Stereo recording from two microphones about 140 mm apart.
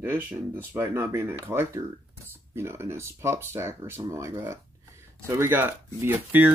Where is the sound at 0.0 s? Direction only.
15° right (ahead or behind).